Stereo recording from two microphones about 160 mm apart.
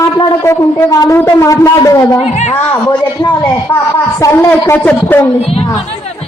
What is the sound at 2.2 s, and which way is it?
Speech, 45° left (ahead or behind).